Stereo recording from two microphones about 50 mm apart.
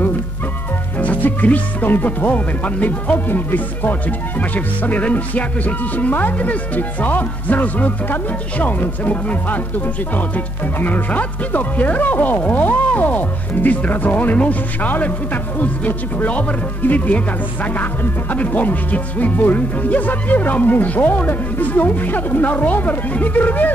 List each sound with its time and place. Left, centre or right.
0.9 s speech: left
18.3 s speech: left